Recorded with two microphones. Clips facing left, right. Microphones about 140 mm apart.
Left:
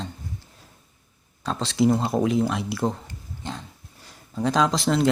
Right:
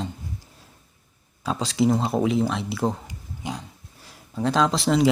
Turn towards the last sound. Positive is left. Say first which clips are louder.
# right 1 dB
turn(degrees=0)  # may be behind; listen again after turning